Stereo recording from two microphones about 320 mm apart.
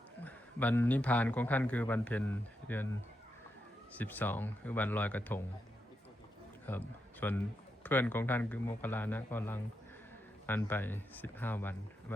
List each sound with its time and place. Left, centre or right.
0.2 s a man's voice: centre
3.9 s a man's voice: centre
6.7 s a man's voice: centre